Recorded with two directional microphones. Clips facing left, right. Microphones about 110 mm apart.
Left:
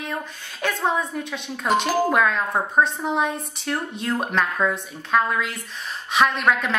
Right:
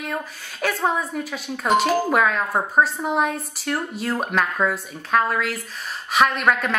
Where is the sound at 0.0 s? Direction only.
Centre (ahead or behind).